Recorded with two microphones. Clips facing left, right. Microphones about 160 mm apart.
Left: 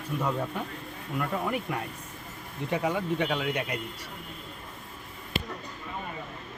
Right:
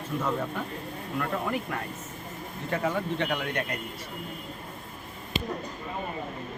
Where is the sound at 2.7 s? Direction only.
10° left (ahead or behind).